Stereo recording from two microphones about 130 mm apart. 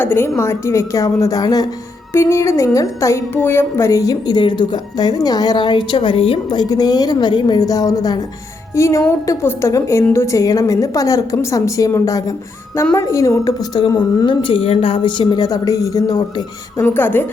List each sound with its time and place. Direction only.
0.0 s a woman's voice: 15° left (ahead or behind)
16.7 s a woman's voice: 15° left (ahead or behind)